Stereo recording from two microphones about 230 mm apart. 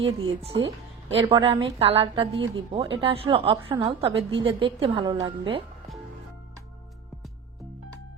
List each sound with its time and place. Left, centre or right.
0.0 s a woman's voice: right